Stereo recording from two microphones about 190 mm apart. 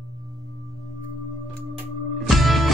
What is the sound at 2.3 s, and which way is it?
Music, centre (ahead or behind).